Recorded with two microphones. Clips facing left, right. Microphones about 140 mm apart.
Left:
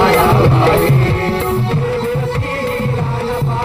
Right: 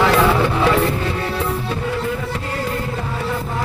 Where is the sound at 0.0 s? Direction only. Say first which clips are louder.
Left 4 dB; 30° left (ahead or behind).